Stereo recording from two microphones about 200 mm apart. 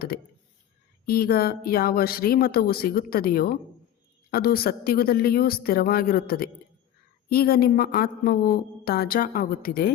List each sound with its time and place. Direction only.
0.1 s a woman's voice: 50° left (ahead or behind)